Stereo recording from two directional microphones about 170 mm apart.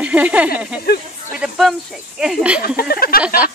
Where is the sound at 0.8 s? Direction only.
70° left (ahead or behind).